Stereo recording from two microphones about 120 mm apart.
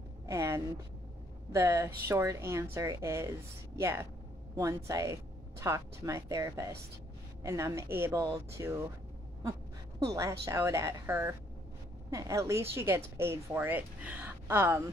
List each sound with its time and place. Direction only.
0.3 s a sound: 25° right (ahead or behind)
1.5 s speech: 25° right (ahead or behind)
9.9 s speech: 25° right (ahead or behind)